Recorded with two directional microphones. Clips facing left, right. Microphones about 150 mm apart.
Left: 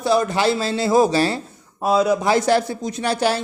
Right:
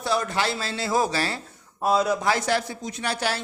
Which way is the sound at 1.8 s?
Centre (ahead or behind).